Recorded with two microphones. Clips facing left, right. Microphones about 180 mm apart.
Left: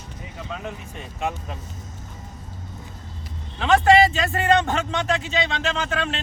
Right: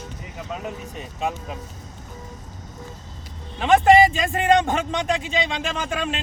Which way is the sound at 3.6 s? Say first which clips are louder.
Right 2 dB; 15° right (ahead or behind).